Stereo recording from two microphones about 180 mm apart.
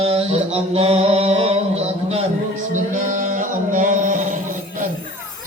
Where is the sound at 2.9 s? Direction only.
45° right (ahead or behind).